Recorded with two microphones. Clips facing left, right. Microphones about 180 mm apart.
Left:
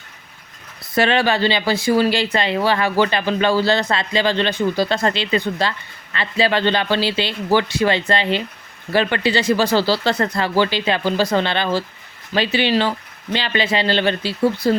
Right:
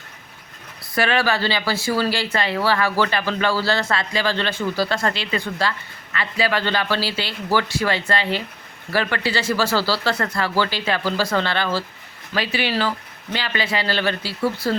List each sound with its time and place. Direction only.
0.9 s speech: 25° left (ahead or behind)